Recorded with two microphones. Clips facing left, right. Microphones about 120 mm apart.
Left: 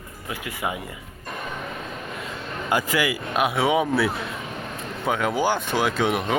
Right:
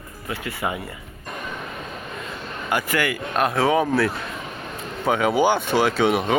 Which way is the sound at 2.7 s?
15° left (ahead or behind).